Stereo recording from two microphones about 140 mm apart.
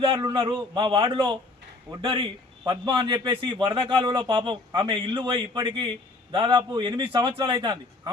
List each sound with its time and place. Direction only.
0.3 s a man's voice: 35° right (ahead or behind)